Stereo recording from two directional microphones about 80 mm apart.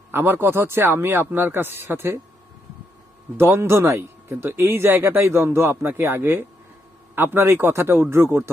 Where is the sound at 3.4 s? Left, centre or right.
Right.